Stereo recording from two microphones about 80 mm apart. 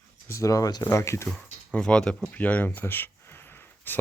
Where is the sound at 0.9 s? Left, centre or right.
Left.